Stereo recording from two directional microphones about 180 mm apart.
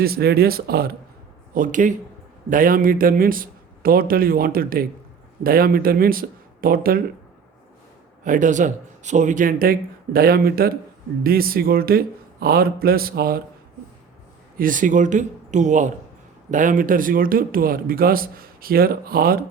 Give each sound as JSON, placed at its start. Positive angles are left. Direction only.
{"t": 0.0, "sound": "a man's voice", "side_deg": -60}
{"t": 1.5, "sound": "speech", "side_deg": -45}
{"t": 8.2, "sound": "a man's voice", "side_deg": -45}
{"t": 14.6, "sound": "speech", "side_deg": -45}